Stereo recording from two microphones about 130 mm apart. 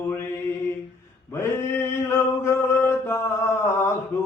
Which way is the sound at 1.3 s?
20° left (ahead or behind).